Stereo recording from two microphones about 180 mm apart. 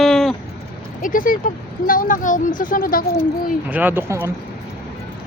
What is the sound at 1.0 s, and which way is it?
Speech, 50° left (ahead or behind).